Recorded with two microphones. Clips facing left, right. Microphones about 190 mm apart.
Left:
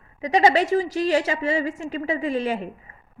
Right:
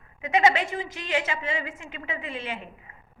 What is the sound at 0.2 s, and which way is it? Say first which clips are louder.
A woman's voice: left 4 dB; 35° left (ahead or behind).